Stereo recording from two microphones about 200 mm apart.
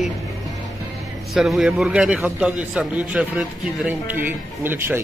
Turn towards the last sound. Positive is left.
turn(degrees=-10)  # may be behind; listen again after turning